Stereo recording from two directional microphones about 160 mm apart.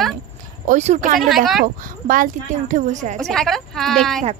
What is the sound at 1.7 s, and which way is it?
Speech, 60° right (ahead or behind).